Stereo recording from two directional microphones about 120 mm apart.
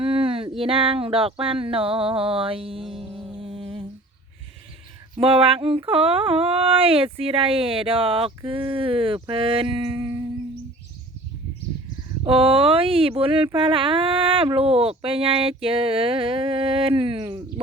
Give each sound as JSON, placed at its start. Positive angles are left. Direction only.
{"t": 0.0, "sound": "a sound", "side_deg": -50}
{"t": 5.1, "sound": "speech", "side_deg": -50}
{"t": 12.2, "sound": "speech", "side_deg": -50}